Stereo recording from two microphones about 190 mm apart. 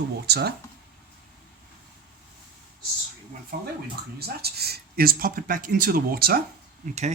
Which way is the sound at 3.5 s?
55° right (ahead or behind).